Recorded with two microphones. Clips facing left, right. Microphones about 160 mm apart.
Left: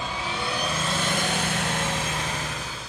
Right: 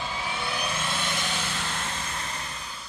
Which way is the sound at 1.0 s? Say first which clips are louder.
Left 5 dB; 45° left (ahead or behind).